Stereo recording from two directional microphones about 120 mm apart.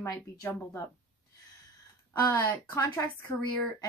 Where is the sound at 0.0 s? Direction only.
20° left (ahead or behind).